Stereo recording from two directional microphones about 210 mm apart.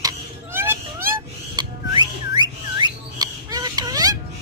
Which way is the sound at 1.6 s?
20° right (ahead or behind).